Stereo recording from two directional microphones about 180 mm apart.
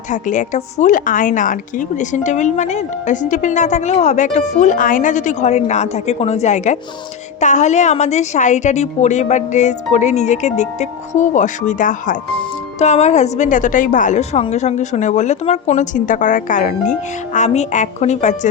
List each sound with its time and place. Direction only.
0.1 s a woman's voice: 45° left (ahead or behind)